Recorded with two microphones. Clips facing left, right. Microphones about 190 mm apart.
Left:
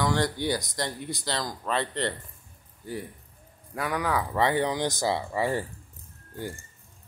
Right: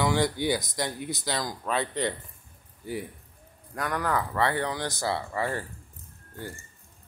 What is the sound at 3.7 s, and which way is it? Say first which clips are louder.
Speech: left 1 dB; 5° left (ahead or behind).